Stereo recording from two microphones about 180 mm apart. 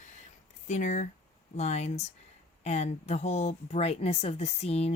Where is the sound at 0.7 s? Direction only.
40° left (ahead or behind).